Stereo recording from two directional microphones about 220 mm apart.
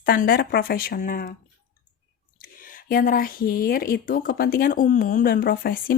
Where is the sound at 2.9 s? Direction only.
40° left (ahead or behind).